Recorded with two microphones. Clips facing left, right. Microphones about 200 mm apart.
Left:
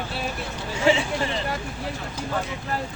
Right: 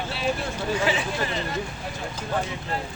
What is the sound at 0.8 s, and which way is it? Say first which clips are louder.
Speech: left 7 dB; 25° left (ahead or behind).